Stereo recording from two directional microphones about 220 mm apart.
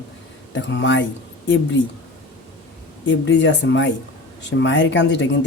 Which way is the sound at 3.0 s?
55° left (ahead or behind).